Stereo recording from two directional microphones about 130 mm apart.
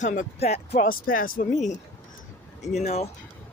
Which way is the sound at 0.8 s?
90° left.